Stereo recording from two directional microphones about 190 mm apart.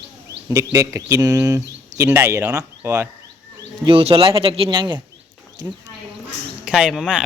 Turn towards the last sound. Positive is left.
turn(degrees=-5)  # may be behind; listen again after turning